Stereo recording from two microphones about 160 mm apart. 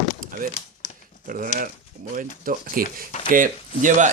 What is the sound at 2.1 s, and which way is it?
Speech, 60° right (ahead or behind).